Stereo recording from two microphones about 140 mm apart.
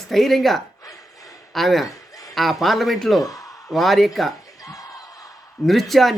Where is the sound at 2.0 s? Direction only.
25° left (ahead or behind).